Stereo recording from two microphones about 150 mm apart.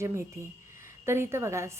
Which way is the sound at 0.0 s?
20° right (ahead or behind).